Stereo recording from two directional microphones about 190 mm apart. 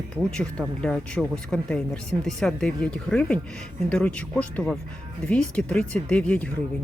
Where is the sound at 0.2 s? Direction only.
5° left (ahead or behind).